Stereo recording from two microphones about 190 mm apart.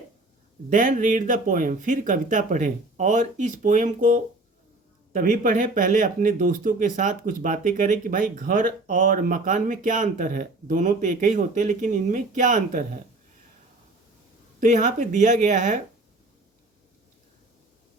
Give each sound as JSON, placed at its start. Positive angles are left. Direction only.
{"t": 0.7, "sound": "speech", "side_deg": -45}
{"t": 14.6, "sound": "speech", "side_deg": -40}